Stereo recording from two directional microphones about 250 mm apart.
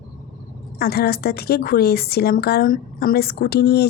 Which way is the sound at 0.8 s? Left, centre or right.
Left.